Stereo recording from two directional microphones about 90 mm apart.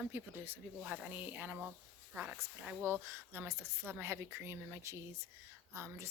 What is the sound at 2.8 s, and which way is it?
A woman's voice, 25° right (ahead or behind).